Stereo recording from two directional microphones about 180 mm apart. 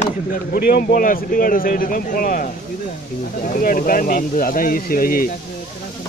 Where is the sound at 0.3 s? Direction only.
55° left (ahead or behind).